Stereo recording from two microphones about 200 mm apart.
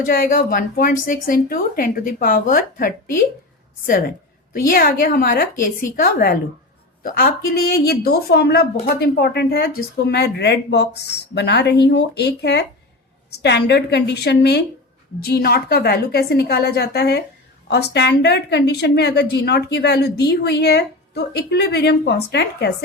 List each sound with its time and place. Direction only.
0.0 s a woman's voice: 45° left (ahead or behind)
4.5 s a woman's voice: 45° left (ahead or behind)